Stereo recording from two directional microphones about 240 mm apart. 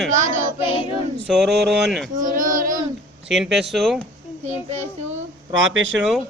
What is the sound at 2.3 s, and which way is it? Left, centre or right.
Child singing, right.